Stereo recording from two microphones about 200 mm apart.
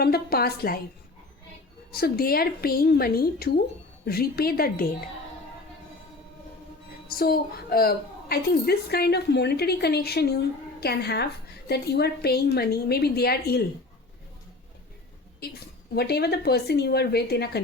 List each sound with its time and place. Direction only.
0.0 s a woman's voice: 50° left (ahead or behind)
1.9 s a woman's voice: 50° left (ahead or behind)
7.2 s a woman's voice: 50° left (ahead or behind)
16.0 s a woman's voice: 55° left (ahead or behind)